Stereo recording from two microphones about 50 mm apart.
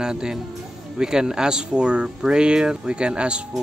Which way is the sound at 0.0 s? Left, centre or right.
Centre.